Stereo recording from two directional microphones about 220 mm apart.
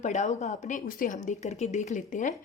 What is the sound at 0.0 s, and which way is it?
A woman's voice, 35° left (ahead or behind).